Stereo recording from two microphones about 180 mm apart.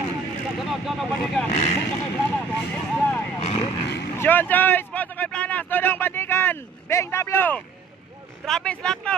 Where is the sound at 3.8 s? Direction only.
75° left (ahead or behind).